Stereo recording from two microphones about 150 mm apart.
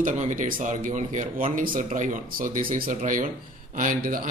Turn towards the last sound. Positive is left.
turn(degrees=-65)  # may be behind; listen again after turning